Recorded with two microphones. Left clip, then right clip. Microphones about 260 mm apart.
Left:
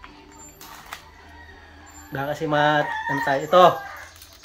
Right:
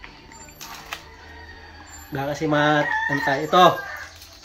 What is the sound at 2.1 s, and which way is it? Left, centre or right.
Chicken, centre.